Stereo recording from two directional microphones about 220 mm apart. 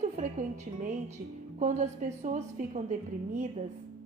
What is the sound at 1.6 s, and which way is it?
A woman's voice, 30° right (ahead or behind).